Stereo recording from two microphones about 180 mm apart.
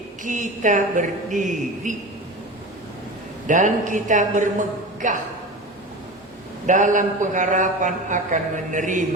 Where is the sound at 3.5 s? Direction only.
45° right (ahead or behind).